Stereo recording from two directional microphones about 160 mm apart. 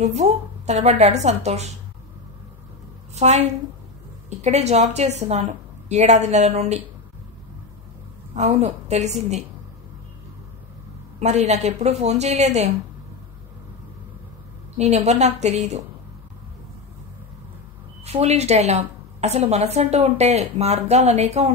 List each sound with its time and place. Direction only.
0.0 s a woman's voice: 45° right (ahead or behind)
3.2 s a woman's voice: 45° right (ahead or behind)
8.4 s a woman's voice: 40° right (ahead or behind)
11.1 s a woman's voice: 45° right (ahead or behind)
14.8 s a woman's voice: 45° right (ahead or behind)
18.0 s a woman's voice: 40° right (ahead or behind)